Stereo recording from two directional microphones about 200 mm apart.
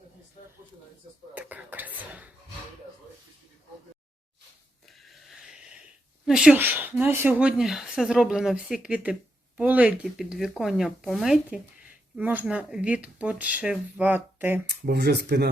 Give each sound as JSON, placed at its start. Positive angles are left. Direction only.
{"t": 1.3, "sound": "speech", "side_deg": -10}
{"t": 4.9, "sound": "a sound", "side_deg": 0}
{"t": 6.2, "sound": "speech", "side_deg": -5}
{"t": 14.7, "sound": "speech", "side_deg": -55}